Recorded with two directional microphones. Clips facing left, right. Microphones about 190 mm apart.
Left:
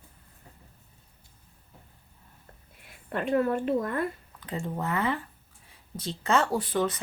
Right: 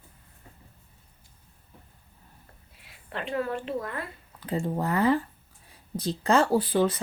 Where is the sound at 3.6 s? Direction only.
45° left (ahead or behind).